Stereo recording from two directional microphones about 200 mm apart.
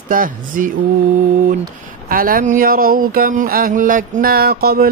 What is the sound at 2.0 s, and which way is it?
Mantra, 45° right (ahead or behind).